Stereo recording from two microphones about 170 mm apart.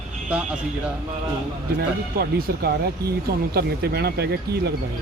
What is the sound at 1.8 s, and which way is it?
Speech, 65° right (ahead or behind).